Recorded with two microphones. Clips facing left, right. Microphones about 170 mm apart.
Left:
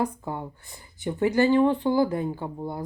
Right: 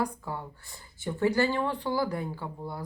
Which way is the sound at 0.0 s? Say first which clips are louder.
Left 4 dB; 20° left (ahead or behind).